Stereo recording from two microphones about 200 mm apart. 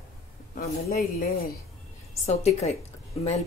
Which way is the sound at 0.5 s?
45° left (ahead or behind).